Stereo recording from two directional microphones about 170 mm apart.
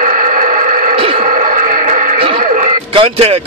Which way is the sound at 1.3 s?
50° right (ahead or behind).